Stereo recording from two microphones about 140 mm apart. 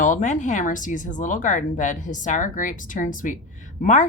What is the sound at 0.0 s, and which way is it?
A woman's voice, 65° left (ahead or behind).